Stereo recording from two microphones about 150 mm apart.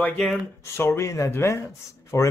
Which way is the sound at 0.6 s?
20° left (ahead or behind).